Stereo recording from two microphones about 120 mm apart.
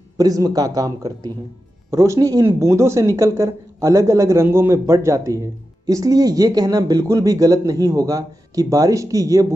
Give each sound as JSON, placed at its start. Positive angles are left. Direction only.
{"t": 0.2, "sound": "a man's voice", "side_deg": -30}